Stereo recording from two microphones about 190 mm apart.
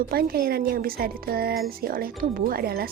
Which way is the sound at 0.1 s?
55° right (ahead or behind).